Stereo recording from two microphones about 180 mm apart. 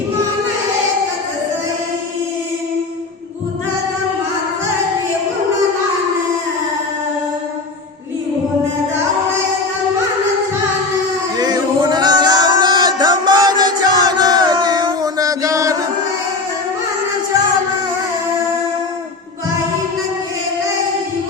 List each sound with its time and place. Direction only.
11.3 s music: 25° right (ahead or behind)